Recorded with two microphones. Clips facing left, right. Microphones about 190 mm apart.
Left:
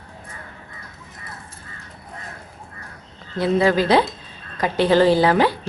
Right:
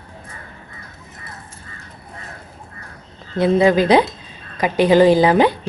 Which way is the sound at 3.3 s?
20° right (ahead or behind).